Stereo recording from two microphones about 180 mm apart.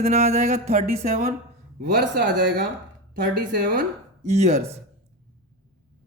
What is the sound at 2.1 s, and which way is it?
Speech, 75° right (ahead or behind).